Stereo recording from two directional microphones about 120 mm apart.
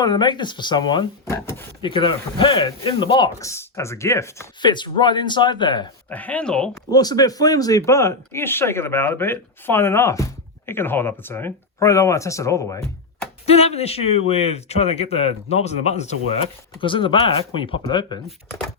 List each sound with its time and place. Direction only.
0.0 s speech: 40° left (ahead or behind)
1.3 s speech: 20° left (ahead or behind)
1.8 s speech: 45° left (ahead or behind)
3.3 s speech: 25° left (ahead or behind)
4.6 s speech: 40° left (ahead or behind)
6.1 s speech: 15° left (ahead or behind)
6.9 s speech: 35° left (ahead or behind)
13.4 s speech: 60° left (ahead or behind)
16.4 s speech: 45° left (ahead or behind)